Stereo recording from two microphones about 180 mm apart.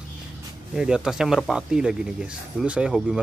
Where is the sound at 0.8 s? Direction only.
5° right (ahead or behind).